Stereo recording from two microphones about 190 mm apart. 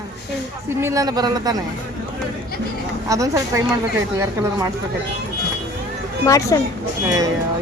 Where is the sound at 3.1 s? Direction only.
15° right (ahead or behind).